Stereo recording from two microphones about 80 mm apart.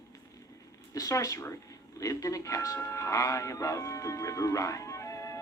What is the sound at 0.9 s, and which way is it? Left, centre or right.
Speech, left.